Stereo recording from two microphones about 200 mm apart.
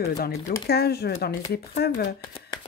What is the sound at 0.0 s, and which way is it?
Speech, 50° left (ahead or behind).